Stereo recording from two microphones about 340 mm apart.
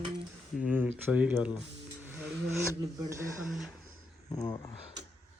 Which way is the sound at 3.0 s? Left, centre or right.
Centre.